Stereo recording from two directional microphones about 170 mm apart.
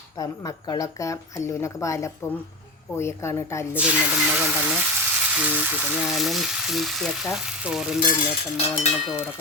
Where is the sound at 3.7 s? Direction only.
10° right (ahead or behind).